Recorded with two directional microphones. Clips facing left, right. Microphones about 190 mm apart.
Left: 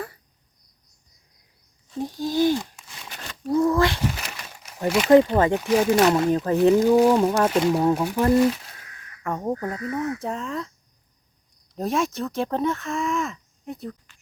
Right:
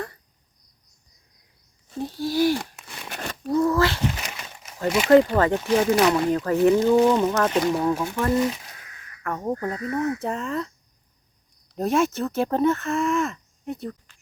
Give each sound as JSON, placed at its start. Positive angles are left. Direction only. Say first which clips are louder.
{"t": 2.0, "sound": "speech", "louder": "even", "side_deg": 15}
{"t": 2.6, "sound": "a sound", "louder": "left 1 dB", "side_deg": -60}
{"t": 3.5, "sound": "a sound", "louder": "left 1 dB", "side_deg": 15}
{"t": 4.9, "sound": "speech", "louder": "left 1 dB", "side_deg": 0}
{"t": 5.1, "sound": "speech", "louder": "even", "side_deg": 20}
{"t": 5.8, "sound": "speech", "louder": "left 1 dB", "side_deg": 0}
{"t": 6.1, "sound": "speech", "louder": "left 1 dB", "side_deg": 20}
{"t": 6.7, "sound": "speech", "louder": "left 1 dB", "side_deg": 5}
{"t": 11.8, "sound": "speech", "louder": "right 3 dB", "side_deg": 0}